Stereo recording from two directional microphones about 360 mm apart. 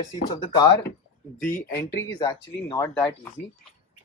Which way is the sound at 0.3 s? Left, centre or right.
Centre.